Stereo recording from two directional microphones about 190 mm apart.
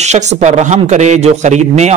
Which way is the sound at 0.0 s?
35° right (ahead or behind).